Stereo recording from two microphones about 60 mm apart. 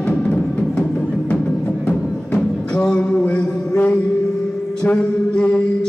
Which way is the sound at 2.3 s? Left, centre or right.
Centre.